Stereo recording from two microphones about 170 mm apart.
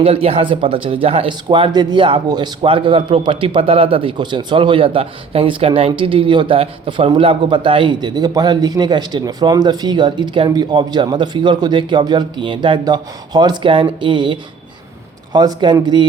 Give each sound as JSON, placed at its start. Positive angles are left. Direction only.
{"t": 0.0, "sound": "speech", "side_deg": -35}